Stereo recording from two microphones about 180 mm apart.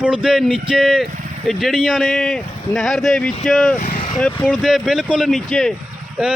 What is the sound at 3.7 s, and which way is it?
Vehicle, 45° left (ahead or behind).